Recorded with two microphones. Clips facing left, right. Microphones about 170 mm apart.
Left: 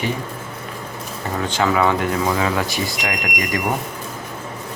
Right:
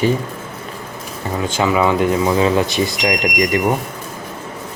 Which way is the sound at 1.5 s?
15° right (ahead or behind).